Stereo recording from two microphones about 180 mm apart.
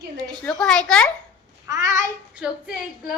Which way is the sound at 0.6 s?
5° left (ahead or behind).